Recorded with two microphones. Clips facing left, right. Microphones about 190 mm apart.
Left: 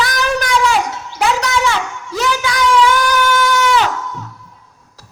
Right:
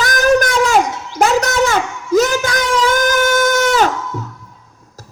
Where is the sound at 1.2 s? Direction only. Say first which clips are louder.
Right 3 dB; 45° right (ahead or behind).